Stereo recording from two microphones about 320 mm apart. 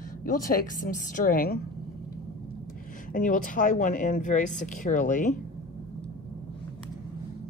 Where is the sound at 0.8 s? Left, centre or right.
Left.